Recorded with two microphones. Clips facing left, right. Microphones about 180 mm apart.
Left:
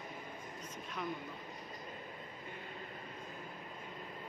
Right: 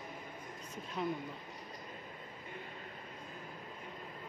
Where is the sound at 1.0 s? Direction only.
25° right (ahead or behind).